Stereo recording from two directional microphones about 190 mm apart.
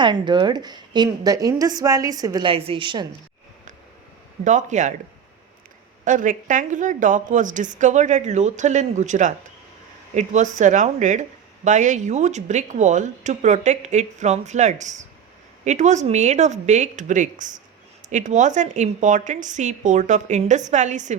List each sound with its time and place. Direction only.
0.0 s a woman's voice: 25° right (ahead or behind)
4.4 s speech: 40° right (ahead or behind)
6.1 s speech: 45° right (ahead or behind)